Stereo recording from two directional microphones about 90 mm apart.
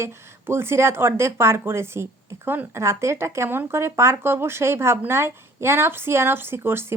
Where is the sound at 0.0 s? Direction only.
25° right (ahead or behind).